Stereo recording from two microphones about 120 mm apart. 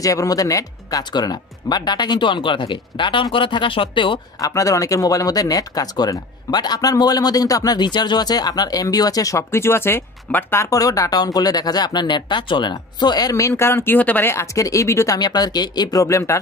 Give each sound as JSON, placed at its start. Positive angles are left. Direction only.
{"t": 0.0, "sound": "speech", "side_deg": 30}
{"t": 4.4, "sound": "speech", "side_deg": 30}